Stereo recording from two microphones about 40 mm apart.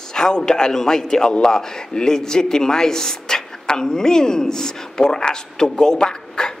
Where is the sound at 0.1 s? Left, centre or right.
Centre.